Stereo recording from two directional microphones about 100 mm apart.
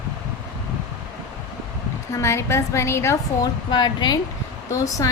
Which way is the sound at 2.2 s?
30° left (ahead or behind).